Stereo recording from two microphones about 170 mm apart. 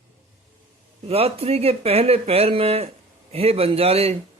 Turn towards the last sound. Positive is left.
turn(degrees=-35)  # may be behind; listen again after turning